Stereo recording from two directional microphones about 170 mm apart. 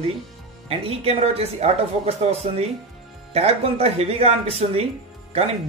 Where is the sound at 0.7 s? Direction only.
35° right (ahead or behind).